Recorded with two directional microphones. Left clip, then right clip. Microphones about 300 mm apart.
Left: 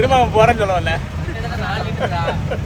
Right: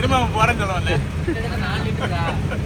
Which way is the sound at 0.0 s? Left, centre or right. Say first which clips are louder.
Left 6 dB; left.